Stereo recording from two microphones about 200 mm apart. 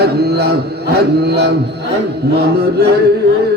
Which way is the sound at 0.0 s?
55° right (ahead or behind).